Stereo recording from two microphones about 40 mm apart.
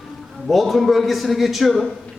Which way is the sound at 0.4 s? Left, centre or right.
Centre.